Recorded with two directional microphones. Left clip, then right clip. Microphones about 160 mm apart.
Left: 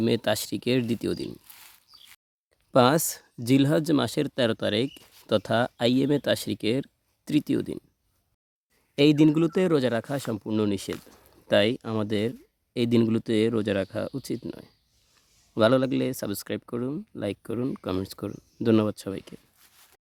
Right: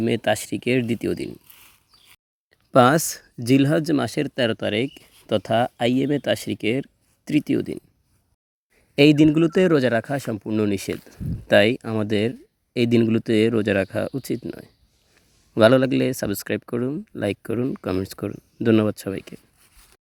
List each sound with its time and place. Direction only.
0.0 s speech: 5° right (ahead or behind)
2.7 s speech: 15° right (ahead or behind)
9.0 s speech: 15° right (ahead or behind)